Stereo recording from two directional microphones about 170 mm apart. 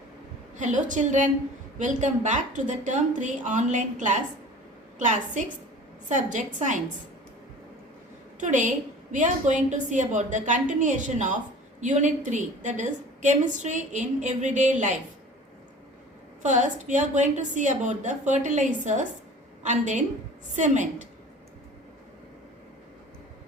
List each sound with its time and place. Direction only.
0.5 s a woman's voice: 45° right (ahead or behind)
8.4 s a woman's voice: 45° right (ahead or behind)
16.4 s a woman's voice: 45° right (ahead or behind)